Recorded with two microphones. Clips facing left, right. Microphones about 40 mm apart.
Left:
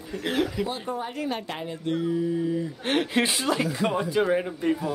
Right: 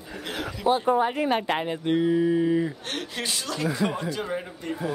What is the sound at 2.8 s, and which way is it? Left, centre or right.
Speech, left.